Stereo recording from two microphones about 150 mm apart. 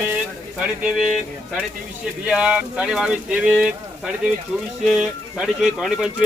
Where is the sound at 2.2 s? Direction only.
5° right (ahead or behind).